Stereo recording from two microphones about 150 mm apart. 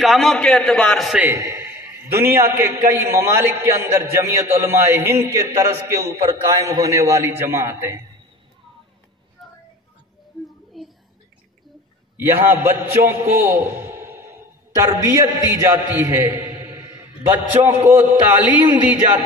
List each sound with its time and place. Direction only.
0.0 s a man's voice: centre (ahead or behind)
1.2 s a man's voice: 20° right (ahead or behind)
9.4 s music: centre (ahead or behind)
10.8 s whispering: centre (ahead or behind)
12.2 s a man's voice: 15° right (ahead or behind)
17.3 s a man's voice: 15° right (ahead or behind)